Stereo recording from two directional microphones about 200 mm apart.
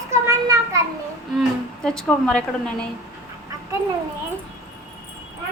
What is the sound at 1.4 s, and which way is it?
A woman's voice, 5° left (ahead or behind).